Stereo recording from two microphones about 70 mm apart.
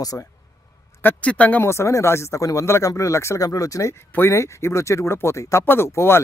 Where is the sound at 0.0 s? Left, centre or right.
Left.